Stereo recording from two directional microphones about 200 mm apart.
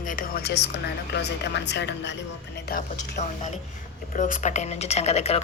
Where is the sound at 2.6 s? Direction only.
45° left (ahead or behind).